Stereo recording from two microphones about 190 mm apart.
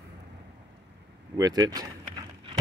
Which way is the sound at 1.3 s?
20° right (ahead or behind).